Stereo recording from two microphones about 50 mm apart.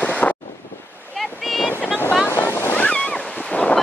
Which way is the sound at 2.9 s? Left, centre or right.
Left.